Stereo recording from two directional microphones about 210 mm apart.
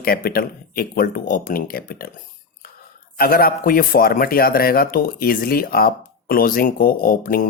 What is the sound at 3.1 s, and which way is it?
Speech, 45° left (ahead or behind).